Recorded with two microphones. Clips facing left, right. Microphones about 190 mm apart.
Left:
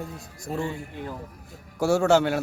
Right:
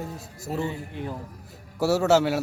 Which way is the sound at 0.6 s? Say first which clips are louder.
Right 1 dB; 20° right (ahead or behind).